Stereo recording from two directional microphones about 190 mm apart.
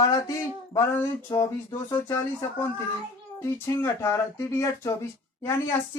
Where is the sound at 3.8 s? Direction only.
15° left (ahead or behind).